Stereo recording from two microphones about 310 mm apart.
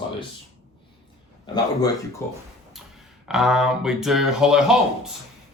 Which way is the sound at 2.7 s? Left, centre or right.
Centre.